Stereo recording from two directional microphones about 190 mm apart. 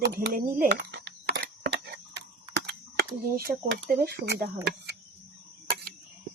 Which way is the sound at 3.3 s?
55° right (ahead or behind).